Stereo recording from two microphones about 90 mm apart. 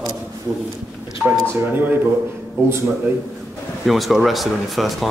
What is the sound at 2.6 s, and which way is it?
Speech, 30° right (ahead or behind).